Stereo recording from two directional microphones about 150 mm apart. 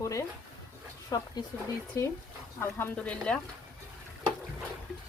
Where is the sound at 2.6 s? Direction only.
10° left (ahead or behind).